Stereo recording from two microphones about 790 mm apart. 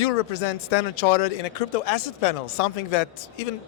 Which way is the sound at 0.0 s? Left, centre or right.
Left.